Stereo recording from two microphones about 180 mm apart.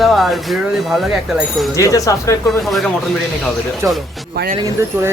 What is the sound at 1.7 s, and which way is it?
Speech, 20° left (ahead or behind).